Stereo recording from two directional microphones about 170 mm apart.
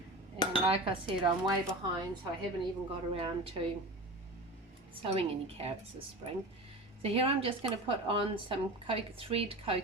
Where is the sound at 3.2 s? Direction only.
35° right (ahead or behind).